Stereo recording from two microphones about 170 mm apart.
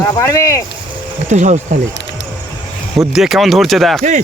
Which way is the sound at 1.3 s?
45° right (ahead or behind).